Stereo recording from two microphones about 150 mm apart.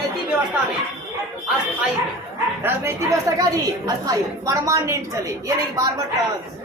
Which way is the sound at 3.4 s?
25° right (ahead or behind).